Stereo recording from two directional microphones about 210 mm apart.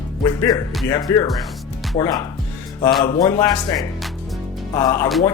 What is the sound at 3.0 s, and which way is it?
Speech, 20° left (ahead or behind).